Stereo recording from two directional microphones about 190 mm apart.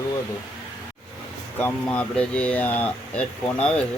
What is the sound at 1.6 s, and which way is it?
Speech, 10° left (ahead or behind).